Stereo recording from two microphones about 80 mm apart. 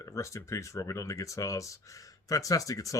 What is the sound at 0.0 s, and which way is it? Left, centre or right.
Speech, left.